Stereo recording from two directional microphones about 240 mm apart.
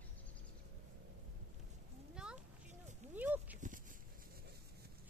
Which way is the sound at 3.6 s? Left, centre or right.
Right.